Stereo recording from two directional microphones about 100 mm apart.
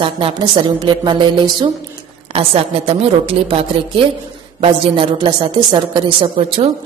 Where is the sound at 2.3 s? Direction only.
75° right (ahead or behind).